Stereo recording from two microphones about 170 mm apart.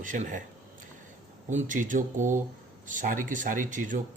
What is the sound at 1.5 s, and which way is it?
Speech, 45° right (ahead or behind).